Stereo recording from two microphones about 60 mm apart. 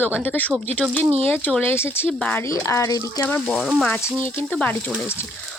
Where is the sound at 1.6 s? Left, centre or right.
Left.